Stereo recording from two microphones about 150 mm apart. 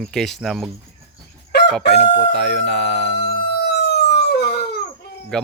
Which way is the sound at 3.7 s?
90° left.